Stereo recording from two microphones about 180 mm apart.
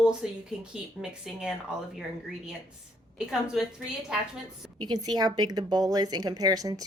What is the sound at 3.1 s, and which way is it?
Speech, 5° right (ahead or behind).